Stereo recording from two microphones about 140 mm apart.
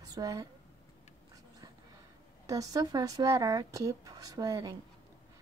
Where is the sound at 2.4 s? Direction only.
25° right (ahead or behind).